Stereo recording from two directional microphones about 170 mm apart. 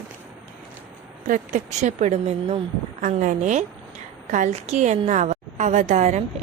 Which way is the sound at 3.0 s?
50° right (ahead or behind).